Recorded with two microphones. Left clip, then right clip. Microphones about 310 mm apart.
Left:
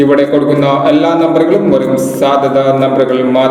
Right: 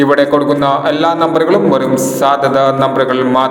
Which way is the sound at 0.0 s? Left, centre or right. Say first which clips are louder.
Left 1 dB; right.